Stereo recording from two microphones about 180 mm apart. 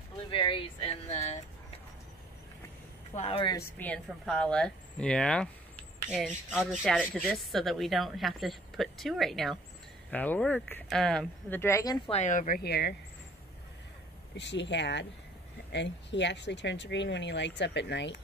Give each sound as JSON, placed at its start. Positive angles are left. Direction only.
{"t": 0.3, "sound": "speech", "side_deg": 30}
{"t": 3.2, "sound": "speech", "side_deg": 30}
{"t": 3.5, "sound": "speech", "side_deg": 10}
{"t": 12.1, "sound": "speech", "side_deg": 40}
{"t": 14.3, "sound": "speech", "side_deg": 75}